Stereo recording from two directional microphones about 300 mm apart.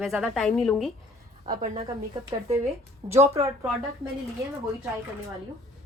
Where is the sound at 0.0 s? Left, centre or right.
Centre.